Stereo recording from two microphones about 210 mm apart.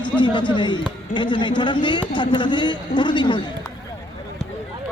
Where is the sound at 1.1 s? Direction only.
20° left (ahead or behind).